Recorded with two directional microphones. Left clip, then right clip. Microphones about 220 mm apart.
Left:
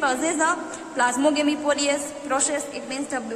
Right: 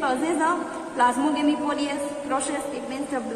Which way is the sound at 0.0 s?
55° left (ahead or behind).